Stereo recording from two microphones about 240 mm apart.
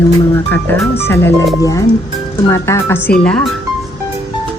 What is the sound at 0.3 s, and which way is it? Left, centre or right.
Speech, centre.